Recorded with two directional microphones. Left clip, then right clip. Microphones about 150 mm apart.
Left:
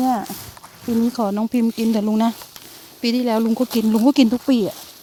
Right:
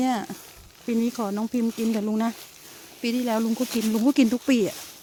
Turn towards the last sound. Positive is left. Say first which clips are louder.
# left 4 dB
turn(degrees=30)  # may be behind; listen again after turning